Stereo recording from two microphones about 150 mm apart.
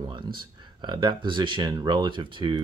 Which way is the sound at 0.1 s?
30° right (ahead or behind).